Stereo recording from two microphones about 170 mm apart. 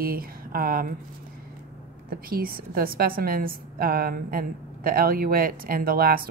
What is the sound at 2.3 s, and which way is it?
A woman's voice, 60° right (ahead or behind).